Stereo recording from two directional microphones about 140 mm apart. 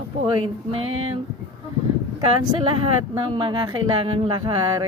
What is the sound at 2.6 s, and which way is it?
A woman's voice, 40° right (ahead or behind).